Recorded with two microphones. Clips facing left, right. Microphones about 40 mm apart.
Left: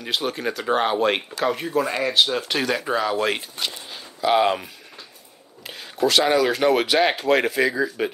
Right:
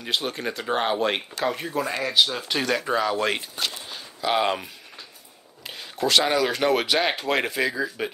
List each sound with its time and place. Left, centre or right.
0.0 s speech: centre